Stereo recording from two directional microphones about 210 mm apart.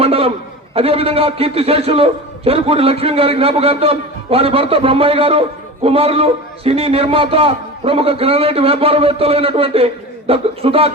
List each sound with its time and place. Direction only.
0.0 s a man's voice: 25° right (ahead or behind)